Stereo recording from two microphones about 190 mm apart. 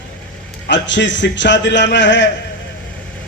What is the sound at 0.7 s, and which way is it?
A man's voice, 70° left (ahead or behind).